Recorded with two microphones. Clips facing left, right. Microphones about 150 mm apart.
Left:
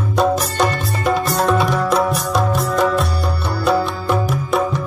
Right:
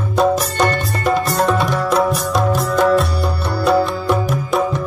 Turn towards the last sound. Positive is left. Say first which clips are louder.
# right 1 dB
turn(degrees=0)  # may be behind; listen again after turning